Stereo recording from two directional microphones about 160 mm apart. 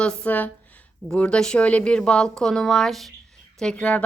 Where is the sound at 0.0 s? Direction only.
5° left (ahead or behind).